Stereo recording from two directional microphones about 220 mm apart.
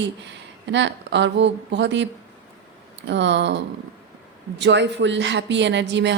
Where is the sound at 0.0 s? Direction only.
55° right (ahead or behind).